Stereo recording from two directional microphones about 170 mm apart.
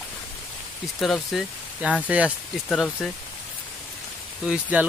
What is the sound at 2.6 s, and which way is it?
Speech, 5° left (ahead or behind).